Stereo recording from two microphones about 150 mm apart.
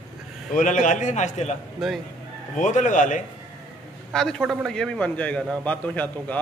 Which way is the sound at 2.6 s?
55° left (ahead or behind).